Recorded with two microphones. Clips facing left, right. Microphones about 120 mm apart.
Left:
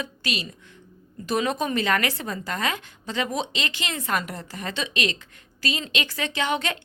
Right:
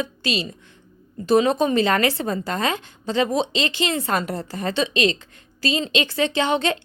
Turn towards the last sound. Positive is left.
turn(degrees=-30)  # may be behind; listen again after turning